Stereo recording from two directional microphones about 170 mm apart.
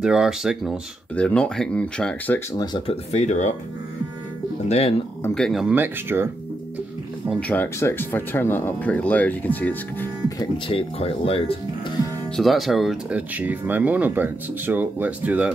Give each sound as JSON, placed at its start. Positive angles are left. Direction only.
{"t": 0.0, "sound": "speech", "side_deg": -5}
{"t": 2.5, "sound": "speech", "side_deg": 25}
{"t": 3.1, "sound": "speech", "side_deg": 45}
{"t": 4.6, "sound": "speech", "side_deg": 40}
{"t": 5.3, "sound": "speech", "side_deg": 0}
{"t": 7.3, "sound": "speech", "side_deg": 10}
{"t": 10.7, "sound": "speech", "side_deg": 35}
{"t": 12.4, "sound": "speech", "side_deg": 0}